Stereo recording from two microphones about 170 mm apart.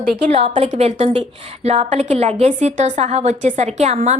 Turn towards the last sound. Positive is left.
turn(degrees=-40)  # may be behind; listen again after turning